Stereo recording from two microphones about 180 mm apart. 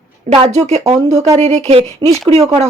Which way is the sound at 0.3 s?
30° right (ahead or behind).